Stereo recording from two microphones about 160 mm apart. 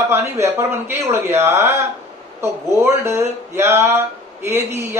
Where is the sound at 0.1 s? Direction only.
15° right (ahead or behind).